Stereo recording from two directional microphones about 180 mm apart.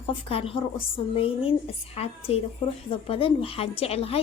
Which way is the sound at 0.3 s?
30° left (ahead or behind).